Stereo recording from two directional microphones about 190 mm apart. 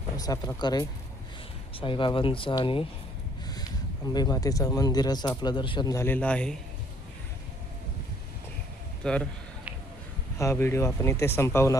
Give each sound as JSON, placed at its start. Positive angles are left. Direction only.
{"t": 0.2, "sound": "speech", "side_deg": 20}
{"t": 3.4, "sound": "a sound", "side_deg": 20}
{"t": 4.1, "sound": "speech", "side_deg": 20}
{"t": 9.0, "sound": "a man's voice", "side_deg": 5}
{"t": 10.3, "sound": "speech", "side_deg": 15}